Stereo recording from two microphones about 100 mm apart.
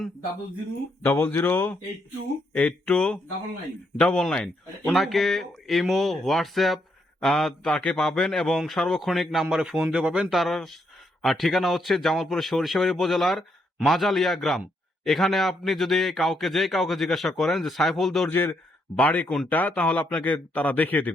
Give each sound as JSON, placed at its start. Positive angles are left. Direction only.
{"t": 1.0, "sound": "speech", "side_deg": 20}
{"t": 18.3, "sound": "speech", "side_deg": 15}